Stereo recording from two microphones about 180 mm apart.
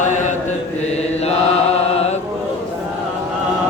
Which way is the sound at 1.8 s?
35° left (ahead or behind).